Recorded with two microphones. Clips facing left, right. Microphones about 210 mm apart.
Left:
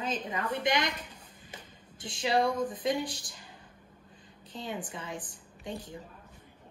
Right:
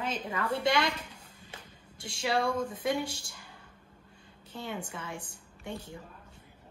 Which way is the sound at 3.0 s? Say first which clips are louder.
Even; 25° right (ahead or behind).